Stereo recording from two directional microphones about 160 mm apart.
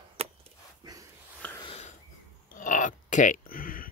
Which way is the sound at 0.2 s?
35° right (ahead or behind).